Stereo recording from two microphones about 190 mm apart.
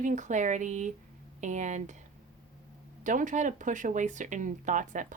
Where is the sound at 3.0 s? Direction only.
40° right (ahead or behind).